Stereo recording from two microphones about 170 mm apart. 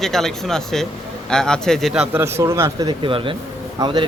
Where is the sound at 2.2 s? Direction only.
15° right (ahead or behind).